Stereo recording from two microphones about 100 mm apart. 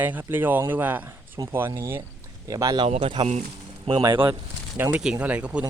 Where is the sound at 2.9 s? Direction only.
90° right.